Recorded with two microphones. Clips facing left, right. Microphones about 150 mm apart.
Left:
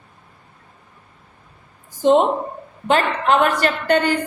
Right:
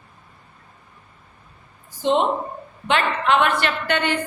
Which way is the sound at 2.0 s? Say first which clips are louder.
Left 5 dB; 45° left (ahead or behind).